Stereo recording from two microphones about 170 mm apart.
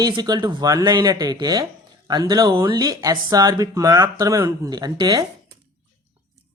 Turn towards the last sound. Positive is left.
turn(degrees=-25)  # may be behind; listen again after turning